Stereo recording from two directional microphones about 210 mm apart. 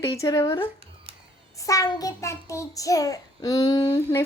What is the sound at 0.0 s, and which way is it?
Speech, 15° left (ahead or behind).